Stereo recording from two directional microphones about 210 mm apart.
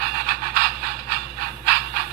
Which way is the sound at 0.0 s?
45° right (ahead or behind).